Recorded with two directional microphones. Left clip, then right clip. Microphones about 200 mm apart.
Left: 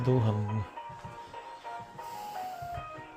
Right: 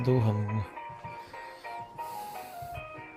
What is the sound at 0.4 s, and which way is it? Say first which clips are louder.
Speech: right 1 dB; 50° right (ahead or behind).